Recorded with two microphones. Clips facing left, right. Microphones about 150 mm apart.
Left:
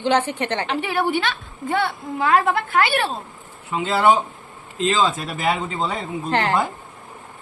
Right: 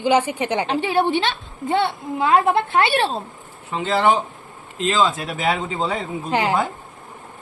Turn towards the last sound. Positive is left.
turn(degrees=-10)  # may be behind; listen again after turning